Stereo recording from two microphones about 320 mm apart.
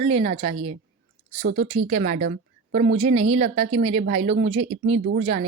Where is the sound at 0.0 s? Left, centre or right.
Centre.